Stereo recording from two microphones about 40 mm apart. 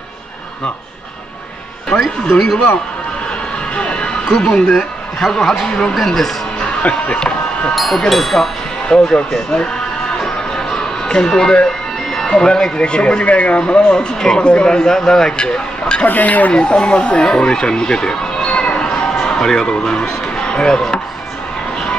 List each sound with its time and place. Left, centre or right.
2.3 s a man's voice: centre
3.7 s speech: left
5.4 s speech: centre
5.7 s speech: left
5.9 s speech: centre
6.8 s speech: left
7.7 s speech: centre
8.8 s speech: centre
10.1 s music: centre
12.4 s speech: centre
16.1 s speech: left
16.5 s speech: left